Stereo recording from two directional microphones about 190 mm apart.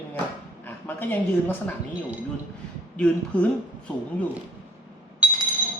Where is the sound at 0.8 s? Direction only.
10° left (ahead or behind).